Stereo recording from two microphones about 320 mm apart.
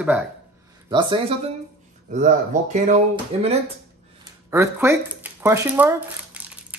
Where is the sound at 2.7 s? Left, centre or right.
Right.